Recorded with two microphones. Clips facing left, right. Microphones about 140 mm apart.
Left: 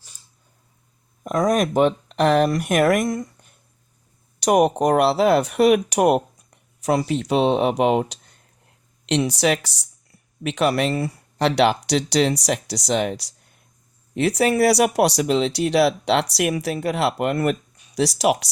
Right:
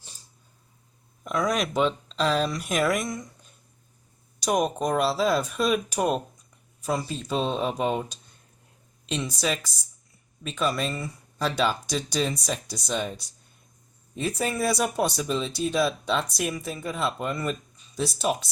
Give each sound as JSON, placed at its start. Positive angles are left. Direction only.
{"t": 1.2, "sound": "speech", "side_deg": 45}
{"t": 4.4, "sound": "speech", "side_deg": 65}